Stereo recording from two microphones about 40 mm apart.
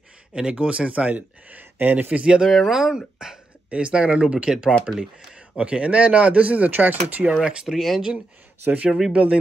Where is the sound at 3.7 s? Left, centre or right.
Right.